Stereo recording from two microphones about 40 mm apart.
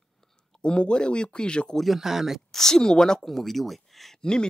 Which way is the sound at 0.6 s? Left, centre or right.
Left.